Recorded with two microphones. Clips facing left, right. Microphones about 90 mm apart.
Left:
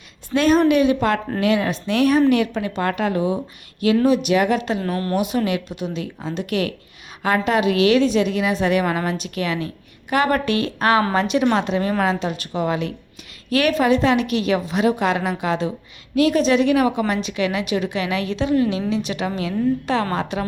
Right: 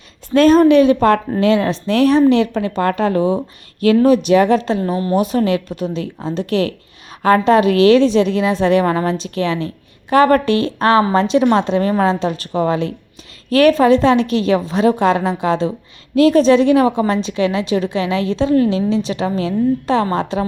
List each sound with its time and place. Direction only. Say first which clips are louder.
0.3 s a woman's voice: right 6 dB; 40° right (ahead or behind)